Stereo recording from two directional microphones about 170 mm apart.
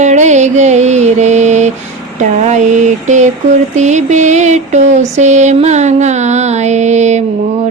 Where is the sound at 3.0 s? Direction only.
45° right (ahead or behind).